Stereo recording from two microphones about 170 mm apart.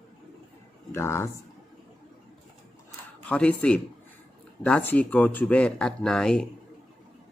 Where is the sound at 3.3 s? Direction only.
5° left (ahead or behind).